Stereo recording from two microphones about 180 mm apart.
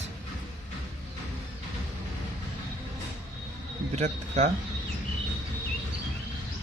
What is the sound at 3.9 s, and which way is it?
Speech, 40° right (ahead or behind).